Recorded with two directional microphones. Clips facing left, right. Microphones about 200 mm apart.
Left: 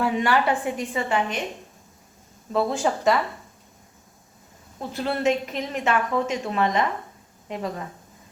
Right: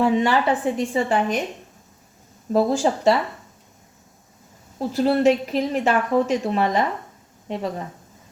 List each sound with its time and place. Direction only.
0.0 s a woman's voice: 25° right (ahead or behind)
2.5 s speech: 35° right (ahead or behind)
4.8 s speech: 35° right (ahead or behind)